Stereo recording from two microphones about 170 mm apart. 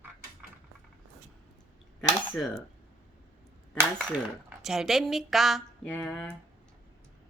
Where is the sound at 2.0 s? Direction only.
10° left (ahead or behind).